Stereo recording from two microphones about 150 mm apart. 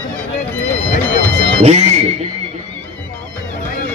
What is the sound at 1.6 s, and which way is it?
Speech, 45° right (ahead or behind).